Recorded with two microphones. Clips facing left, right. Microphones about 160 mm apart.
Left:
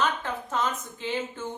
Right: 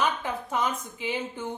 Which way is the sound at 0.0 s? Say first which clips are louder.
Even; 10° right (ahead or behind).